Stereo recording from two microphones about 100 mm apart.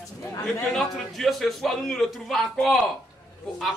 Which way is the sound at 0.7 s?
5° left (ahead or behind).